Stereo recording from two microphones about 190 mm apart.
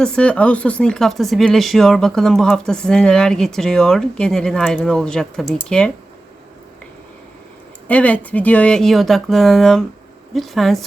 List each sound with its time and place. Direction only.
0.0 s speech: 5° left (ahead or behind)
7.9 s speech: 5° left (ahead or behind)